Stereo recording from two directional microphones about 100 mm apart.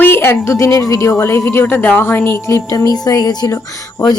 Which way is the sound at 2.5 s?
30° left (ahead or behind).